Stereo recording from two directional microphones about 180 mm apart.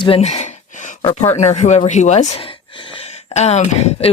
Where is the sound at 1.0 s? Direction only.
35° left (ahead or behind).